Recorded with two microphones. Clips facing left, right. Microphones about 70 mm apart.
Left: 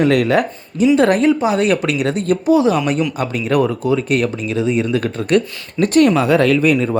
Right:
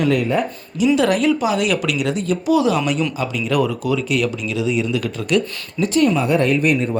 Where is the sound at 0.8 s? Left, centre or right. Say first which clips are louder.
Left 3 dB; left.